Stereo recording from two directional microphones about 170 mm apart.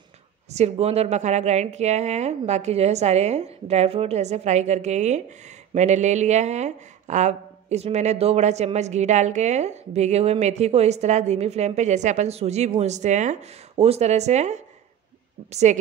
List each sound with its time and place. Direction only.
0.5 s a woman's voice: 40° right (ahead or behind)